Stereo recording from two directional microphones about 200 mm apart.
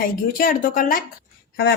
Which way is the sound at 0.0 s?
45° left (ahead or behind).